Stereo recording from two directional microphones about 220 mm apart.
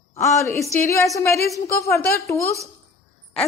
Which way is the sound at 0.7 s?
15° left (ahead or behind).